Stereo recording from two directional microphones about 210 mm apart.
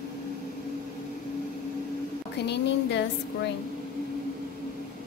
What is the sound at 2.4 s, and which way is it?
Speech, 55° left (ahead or behind).